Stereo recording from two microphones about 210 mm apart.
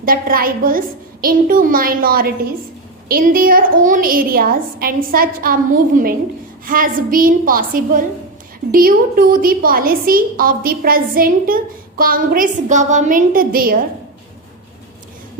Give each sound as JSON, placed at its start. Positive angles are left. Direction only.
{"t": 0.0, "sound": "a woman's voice", "side_deg": -45}